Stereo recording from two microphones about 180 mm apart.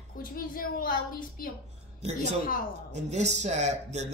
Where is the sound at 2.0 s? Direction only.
40° right (ahead or behind).